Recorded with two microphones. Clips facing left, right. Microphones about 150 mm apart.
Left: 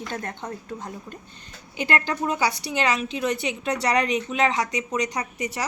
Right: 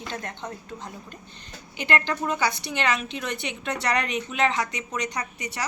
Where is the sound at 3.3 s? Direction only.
40° left (ahead or behind).